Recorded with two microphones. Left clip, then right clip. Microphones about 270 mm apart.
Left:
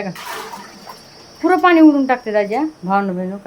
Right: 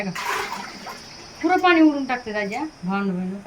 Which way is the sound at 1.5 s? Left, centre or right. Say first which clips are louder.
Left 6 dB; centre.